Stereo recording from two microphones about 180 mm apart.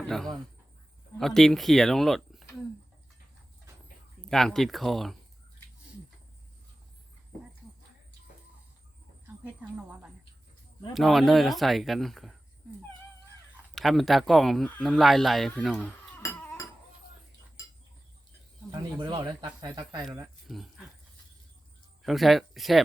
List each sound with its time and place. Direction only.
0.0 s a man's voice: centre (ahead or behind)
4.3 s a man's voice: centre (ahead or behind)
9.2 s a sound: 5° right (ahead or behind)
10.9 s a man's voice: centre (ahead or behind)
13.7 s speech: centre (ahead or behind)
18.7 s speech: 25° right (ahead or behind)
20.5 s a man's voice: centre (ahead or behind)
22.0 s a man's voice: centre (ahead or behind)